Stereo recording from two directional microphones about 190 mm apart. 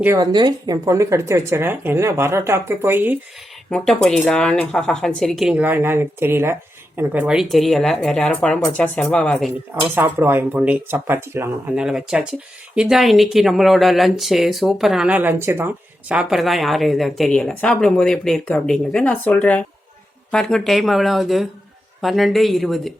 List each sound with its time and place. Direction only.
0.0 s a woman's voice: 15° right (ahead or behind)
3.7 s speech: 5° left (ahead or behind)
9.9 s speech: 10° right (ahead or behind)